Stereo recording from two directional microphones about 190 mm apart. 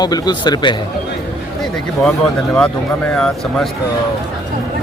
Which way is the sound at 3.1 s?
5° left (ahead or behind).